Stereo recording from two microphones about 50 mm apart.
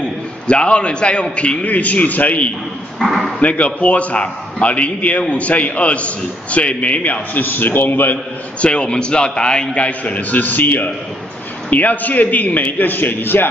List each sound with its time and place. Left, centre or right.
0.5 s a man's voice: left
3.0 s speech: centre
3.3 s a man's voice: left
8.5 s a man's voice: left
9.8 s a man's voice: left